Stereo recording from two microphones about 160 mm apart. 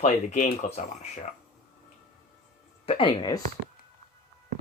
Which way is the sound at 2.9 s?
30° left (ahead or behind).